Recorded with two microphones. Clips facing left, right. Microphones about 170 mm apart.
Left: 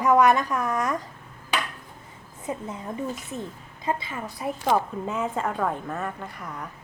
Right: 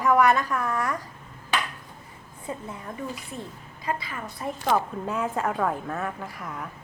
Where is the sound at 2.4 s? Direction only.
20° left (ahead or behind).